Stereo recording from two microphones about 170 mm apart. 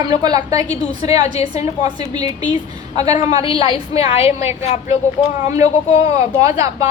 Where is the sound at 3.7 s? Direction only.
35° left (ahead or behind).